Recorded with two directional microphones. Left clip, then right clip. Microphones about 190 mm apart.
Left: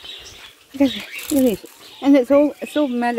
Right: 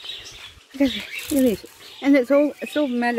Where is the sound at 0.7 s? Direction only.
Centre (ahead or behind).